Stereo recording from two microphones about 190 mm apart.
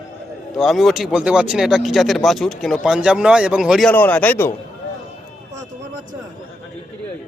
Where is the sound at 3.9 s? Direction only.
10° left (ahead or behind).